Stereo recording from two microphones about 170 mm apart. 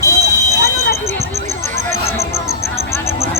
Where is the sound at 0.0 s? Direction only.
20° right (ahead or behind).